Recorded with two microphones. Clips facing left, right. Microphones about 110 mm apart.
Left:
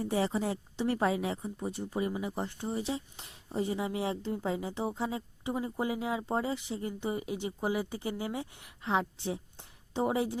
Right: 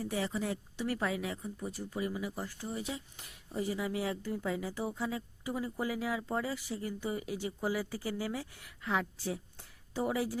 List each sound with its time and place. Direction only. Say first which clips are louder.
0.0 s a woman's voice: left 4 dB; 30° left (ahead or behind)